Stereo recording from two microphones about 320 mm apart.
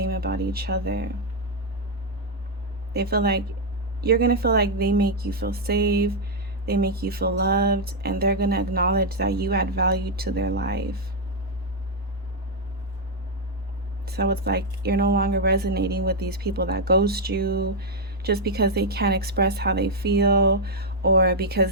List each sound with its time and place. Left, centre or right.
0.0 s speech: right
2.9 s speech: right
14.0 s speech: right